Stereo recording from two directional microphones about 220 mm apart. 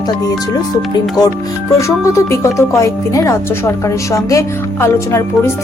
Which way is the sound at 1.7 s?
15° left (ahead or behind).